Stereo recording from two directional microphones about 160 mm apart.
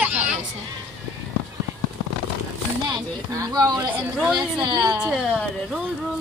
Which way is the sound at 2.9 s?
20° right (ahead or behind).